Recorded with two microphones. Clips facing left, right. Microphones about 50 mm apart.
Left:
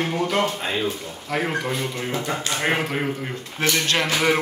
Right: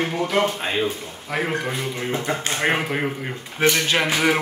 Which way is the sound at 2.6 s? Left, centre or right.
Centre.